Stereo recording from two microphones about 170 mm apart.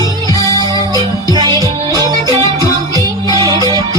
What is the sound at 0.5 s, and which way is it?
Music, 20° left (ahead or behind).